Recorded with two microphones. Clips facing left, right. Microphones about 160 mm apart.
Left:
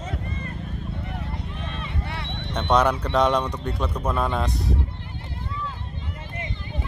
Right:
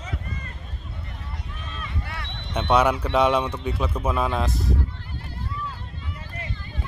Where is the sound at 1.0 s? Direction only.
65° left (ahead or behind).